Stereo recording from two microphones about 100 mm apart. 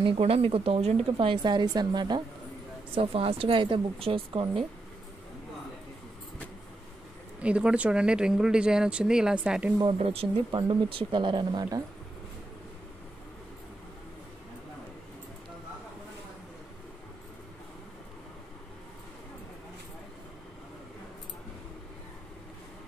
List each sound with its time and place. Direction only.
0.0 s speech: 75° right (ahead or behind); by 1.0 s 90° right
1.0 s a woman's voice: 55° right (ahead or behind)
2.9 s a woman's voice: 70° right (ahead or behind)
7.3 s speech: 10° right (ahead or behind)
9.9 s speech: 70° right (ahead or behind); by 11.8 s 45° right (ahead or behind)